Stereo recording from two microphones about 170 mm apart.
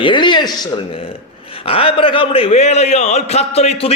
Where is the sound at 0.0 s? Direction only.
30° left (ahead or behind).